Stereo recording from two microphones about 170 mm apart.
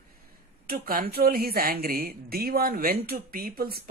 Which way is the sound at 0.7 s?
60° right (ahead or behind).